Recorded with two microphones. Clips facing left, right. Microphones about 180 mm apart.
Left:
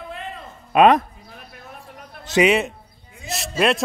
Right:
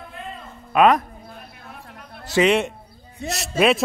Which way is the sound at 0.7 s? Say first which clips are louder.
Left 2 dB; 25° left (ahead or behind).